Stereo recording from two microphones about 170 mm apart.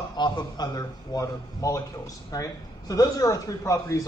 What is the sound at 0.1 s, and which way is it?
A man's voice, 25° left (ahead or behind).